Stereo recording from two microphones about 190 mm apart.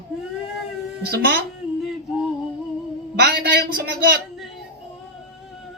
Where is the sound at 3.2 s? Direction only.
60° right (ahead or behind).